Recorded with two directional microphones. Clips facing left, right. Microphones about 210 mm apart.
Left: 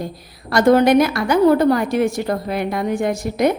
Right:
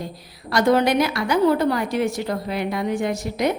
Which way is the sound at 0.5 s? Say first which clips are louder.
Left 5 dB; 50° left (ahead or behind).